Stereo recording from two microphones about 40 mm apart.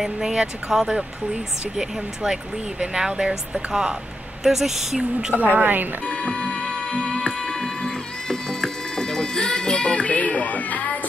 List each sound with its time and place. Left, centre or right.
0.0 s speech: centre
5.4 s a woman's voice: right
6.0 s music: left
10.1 s cat: left